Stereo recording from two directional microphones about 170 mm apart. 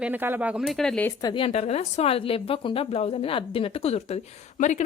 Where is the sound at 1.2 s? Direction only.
30° left (ahead or behind).